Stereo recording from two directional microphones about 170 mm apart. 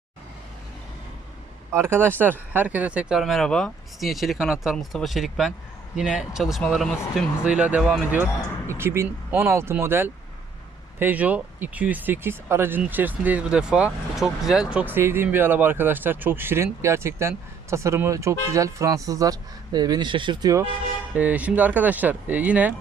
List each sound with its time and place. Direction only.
1.7 s speech: 15° right (ahead or behind); by 6.9 s 5° left (ahead or behind)
7.2 s speech: 5° right (ahead or behind)
21.1 s speech: 10° right (ahead or behind)